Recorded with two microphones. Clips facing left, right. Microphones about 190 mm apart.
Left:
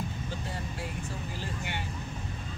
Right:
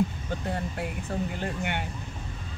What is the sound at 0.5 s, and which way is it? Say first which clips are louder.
Speech: right 6 dB; 60° right (ahead or behind).